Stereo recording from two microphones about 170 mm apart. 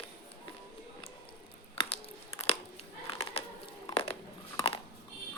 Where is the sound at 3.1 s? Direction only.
35° left (ahead or behind).